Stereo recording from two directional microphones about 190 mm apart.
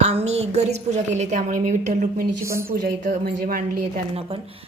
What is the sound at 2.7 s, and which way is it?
A woman's voice, 50° right (ahead or behind).